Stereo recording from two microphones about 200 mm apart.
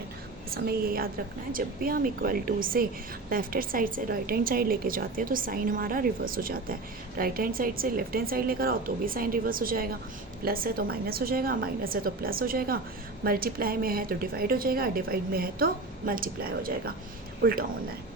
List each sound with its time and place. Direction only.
0.5 s a woman's voice: 50° right (ahead or behind)